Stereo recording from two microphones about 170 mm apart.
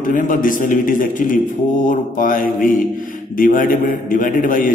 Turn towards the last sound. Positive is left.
turn(degrees=50)  # may be behind; listen again after turning